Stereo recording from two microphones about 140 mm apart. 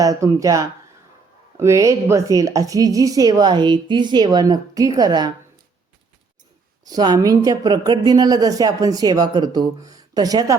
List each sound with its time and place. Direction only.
0.0 s speech: 25° right (ahead or behind)
6.8 s speech: 30° right (ahead or behind)